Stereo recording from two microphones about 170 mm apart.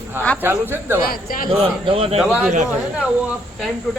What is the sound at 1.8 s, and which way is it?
Speech, 35° right (ahead or behind).